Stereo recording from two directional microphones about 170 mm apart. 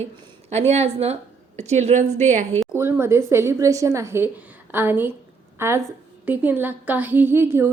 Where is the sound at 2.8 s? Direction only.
15° right (ahead or behind).